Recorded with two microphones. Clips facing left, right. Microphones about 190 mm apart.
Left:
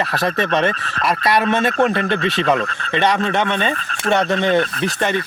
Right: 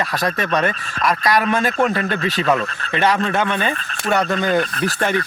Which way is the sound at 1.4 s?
Centre (ahead or behind).